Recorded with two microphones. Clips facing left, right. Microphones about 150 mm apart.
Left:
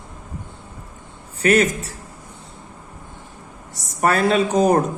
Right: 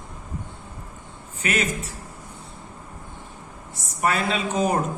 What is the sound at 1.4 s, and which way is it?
Speech, 40° left (ahead or behind).